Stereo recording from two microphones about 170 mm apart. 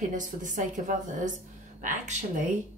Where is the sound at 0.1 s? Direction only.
50° right (ahead or behind).